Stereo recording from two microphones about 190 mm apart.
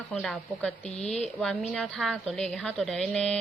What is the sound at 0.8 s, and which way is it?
Speech, 35° left (ahead or behind).